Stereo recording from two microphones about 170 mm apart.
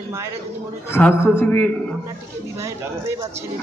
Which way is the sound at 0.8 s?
15° left (ahead or behind).